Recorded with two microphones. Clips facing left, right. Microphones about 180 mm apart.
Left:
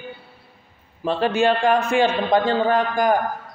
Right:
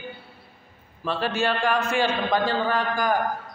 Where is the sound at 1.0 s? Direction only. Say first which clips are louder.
Left 6 dB; 20° left (ahead or behind).